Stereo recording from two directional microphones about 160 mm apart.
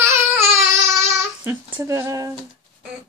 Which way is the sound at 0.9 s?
15° right (ahead or behind).